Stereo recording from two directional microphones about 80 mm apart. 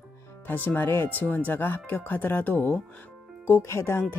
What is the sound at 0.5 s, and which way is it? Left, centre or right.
Speech, left.